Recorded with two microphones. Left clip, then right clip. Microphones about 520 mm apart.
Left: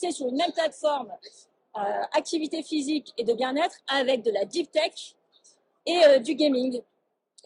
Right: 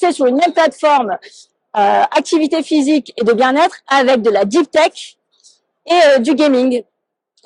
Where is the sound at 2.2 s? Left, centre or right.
Right.